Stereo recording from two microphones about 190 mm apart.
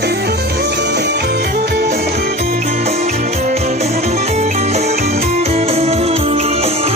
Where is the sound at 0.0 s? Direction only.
60° right (ahead or behind).